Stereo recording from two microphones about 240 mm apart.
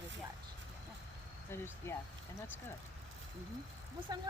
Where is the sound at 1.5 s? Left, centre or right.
Centre.